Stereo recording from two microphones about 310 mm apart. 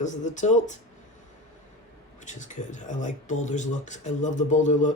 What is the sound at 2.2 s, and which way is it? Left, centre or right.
Speech, left.